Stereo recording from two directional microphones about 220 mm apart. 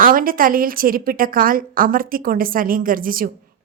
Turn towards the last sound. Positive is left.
turn(degrees=-40)  # may be behind; listen again after turning